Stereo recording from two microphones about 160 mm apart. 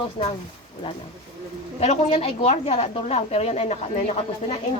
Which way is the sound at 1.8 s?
40° left (ahead or behind).